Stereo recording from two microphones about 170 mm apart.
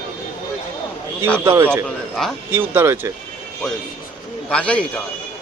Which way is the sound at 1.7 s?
Centre (ahead or behind).